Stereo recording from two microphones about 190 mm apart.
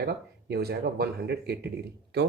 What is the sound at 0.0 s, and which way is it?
Speech, 55° right (ahead or behind).